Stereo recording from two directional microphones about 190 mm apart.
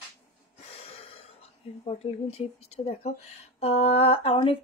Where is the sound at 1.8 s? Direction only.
30° left (ahead or behind).